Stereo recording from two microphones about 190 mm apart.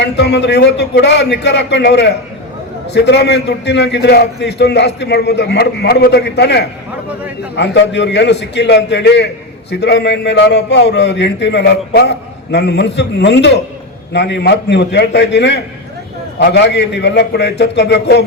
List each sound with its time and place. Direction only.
0.0 s a man's voice: 60° left (ahead or behind)